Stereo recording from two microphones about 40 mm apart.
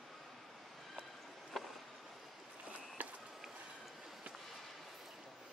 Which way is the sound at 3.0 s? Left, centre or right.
Right.